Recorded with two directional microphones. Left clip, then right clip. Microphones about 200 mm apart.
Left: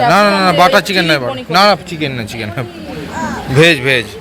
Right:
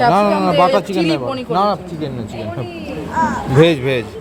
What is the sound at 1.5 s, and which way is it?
Speech, 40° left (ahead or behind).